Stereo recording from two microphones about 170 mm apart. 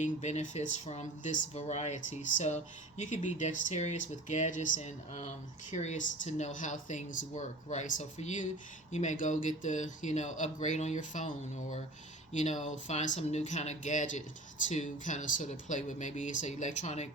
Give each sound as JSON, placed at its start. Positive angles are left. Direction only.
{"t": 0.0, "sound": "speech", "side_deg": 45}